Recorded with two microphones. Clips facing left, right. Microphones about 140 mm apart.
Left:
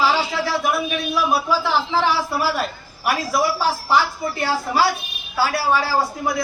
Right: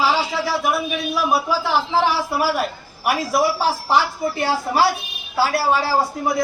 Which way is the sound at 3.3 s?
25° right (ahead or behind).